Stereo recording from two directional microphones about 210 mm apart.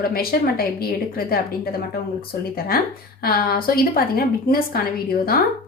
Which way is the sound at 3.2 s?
45° left (ahead or behind).